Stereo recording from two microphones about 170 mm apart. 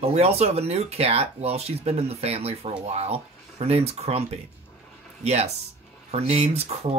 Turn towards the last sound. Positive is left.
turn(degrees=-40)  # may be behind; listen again after turning